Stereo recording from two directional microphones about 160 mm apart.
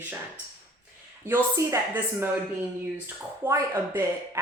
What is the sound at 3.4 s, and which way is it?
Speech, 15° right (ahead or behind).